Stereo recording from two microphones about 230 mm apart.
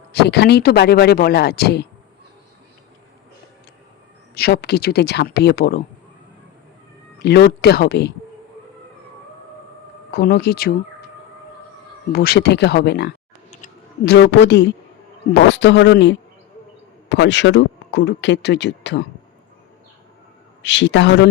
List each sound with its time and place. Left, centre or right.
0.1 s speech: left
4.4 s speech: left
7.2 s speech: left
10.1 s speech: left
12.1 s speech: left
20.6 s speech: left